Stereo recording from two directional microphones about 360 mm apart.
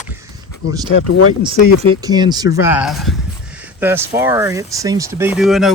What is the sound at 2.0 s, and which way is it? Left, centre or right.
Speech, centre.